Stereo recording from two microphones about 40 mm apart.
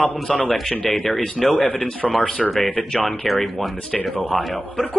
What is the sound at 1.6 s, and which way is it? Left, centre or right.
Speech, centre.